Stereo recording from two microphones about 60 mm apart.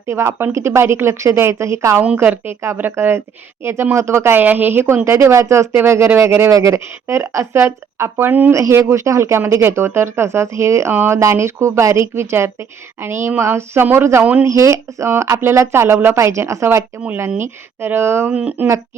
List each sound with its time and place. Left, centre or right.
0.1 s speech: right
2.1 s speech: right
4.4 s speech: right
6.5 s speech: right
8.3 s speech: right
8.8 s speech: right
10.9 s speech: right
11.2 s speech: right
12.1 s speech: right
14.4 s speech: right
18.3 s speech: right